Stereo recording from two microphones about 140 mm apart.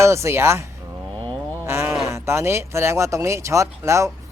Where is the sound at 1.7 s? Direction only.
20° right (ahead or behind).